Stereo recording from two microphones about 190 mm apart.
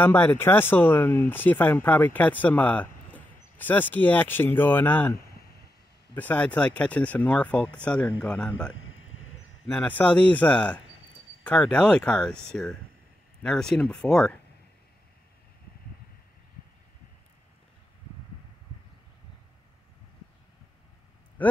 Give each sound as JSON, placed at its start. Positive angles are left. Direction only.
{"t": 0.0, "sound": "speech", "side_deg": 10}
{"t": 8.7, "sound": "a sound", "side_deg": 90}
{"t": 9.7, "sound": "speech", "side_deg": 10}
{"t": 21.4, "sound": "speech", "side_deg": 10}